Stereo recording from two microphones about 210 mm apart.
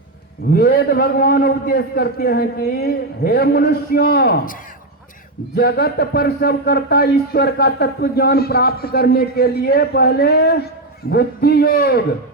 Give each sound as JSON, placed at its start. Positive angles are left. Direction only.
{"t": 0.5, "sound": "speech", "side_deg": 45}
{"t": 5.5, "sound": "speech", "side_deg": 50}